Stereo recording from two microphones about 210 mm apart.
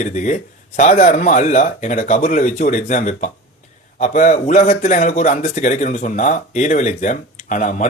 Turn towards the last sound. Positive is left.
turn(degrees=35)  # may be behind; listen again after turning